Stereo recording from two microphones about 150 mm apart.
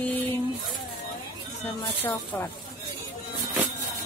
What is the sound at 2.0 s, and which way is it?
Speech, 15° left (ahead or behind).